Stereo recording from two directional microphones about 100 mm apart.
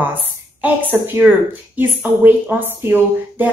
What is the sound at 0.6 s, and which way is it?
Speech, 20° right (ahead or behind).